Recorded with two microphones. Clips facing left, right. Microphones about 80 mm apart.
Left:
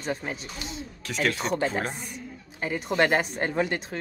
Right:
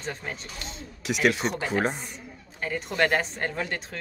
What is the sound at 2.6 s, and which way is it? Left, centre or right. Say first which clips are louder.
Speech: left 2 dB; centre.